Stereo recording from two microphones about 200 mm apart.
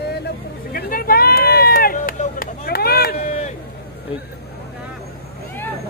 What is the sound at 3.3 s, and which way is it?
Run, 35° left (ahead or behind).